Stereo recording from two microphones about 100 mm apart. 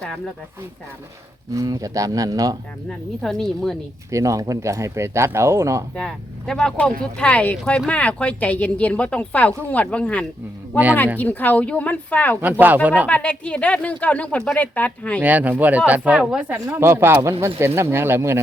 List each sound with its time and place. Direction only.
1.5 s speech: 35° right (ahead or behind)
3.2 s speech: 5° left (ahead or behind)
4.1 s speech: 30° right (ahead or behind)
6.0 s a woman's voice: 5° left (ahead or behind)
7.6 s speech: 5° left (ahead or behind)
7.9 s a woman's voice: 15° left (ahead or behind)
12.4 s speech: 20° right (ahead or behind)
13.1 s a woman's voice: 15° left (ahead or behind)
15.2 s speech: 15° right (ahead or behind)
16.6 s speech: 30° right (ahead or behind)